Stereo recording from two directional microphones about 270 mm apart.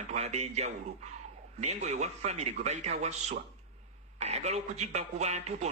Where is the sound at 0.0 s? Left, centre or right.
Right.